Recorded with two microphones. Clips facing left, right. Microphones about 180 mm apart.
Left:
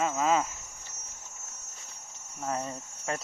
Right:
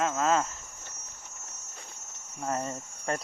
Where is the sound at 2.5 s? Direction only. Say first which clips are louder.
Right 1 dB; centre (ahead or behind).